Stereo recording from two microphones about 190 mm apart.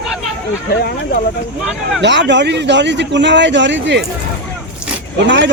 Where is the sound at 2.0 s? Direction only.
65° right (ahead or behind).